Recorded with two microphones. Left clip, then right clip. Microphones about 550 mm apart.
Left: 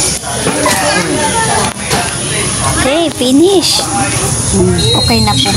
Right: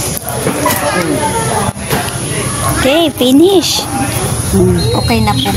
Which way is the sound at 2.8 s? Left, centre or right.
Right.